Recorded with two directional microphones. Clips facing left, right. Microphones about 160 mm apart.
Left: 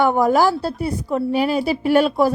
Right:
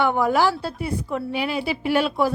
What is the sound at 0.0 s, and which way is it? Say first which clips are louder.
A woman's voice: left 4 dB; 40° left (ahead or behind).